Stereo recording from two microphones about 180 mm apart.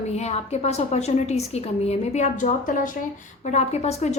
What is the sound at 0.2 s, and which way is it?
A woman's voice, 35° left (ahead or behind).